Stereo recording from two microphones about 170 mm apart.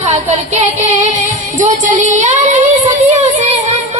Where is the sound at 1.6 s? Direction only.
45° right (ahead or behind).